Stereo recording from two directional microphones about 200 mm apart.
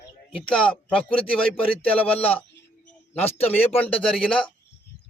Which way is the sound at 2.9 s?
30° left (ahead or behind).